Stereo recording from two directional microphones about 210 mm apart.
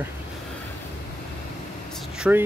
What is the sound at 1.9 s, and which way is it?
Vehicle, centre (ahead or behind).